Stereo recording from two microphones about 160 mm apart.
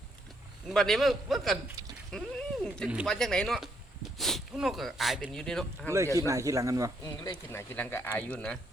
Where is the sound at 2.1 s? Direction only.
5° left (ahead or behind).